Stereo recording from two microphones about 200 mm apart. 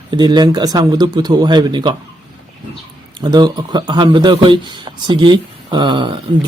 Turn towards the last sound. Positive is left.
turn(degrees=-25)  # may be behind; listen again after turning